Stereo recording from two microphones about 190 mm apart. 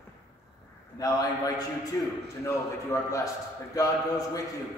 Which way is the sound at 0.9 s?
20° left (ahead or behind).